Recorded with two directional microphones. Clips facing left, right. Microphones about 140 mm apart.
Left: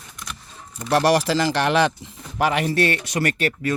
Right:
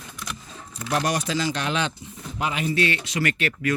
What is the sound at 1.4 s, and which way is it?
Speech, 80° left.